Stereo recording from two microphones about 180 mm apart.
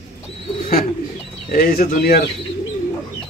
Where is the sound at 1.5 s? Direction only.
55° left (ahead or behind).